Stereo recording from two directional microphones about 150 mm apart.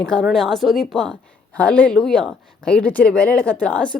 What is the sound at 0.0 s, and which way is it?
A woman's voice, 5° left (ahead or behind).